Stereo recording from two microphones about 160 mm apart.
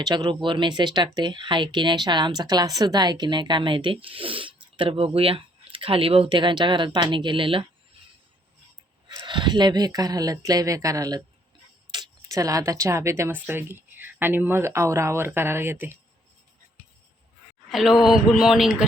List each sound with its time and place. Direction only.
0.0 s speech: 25° right (ahead or behind)
9.0 s speech: 25° right (ahead or behind)
17.7 s speech: centre (ahead or behind)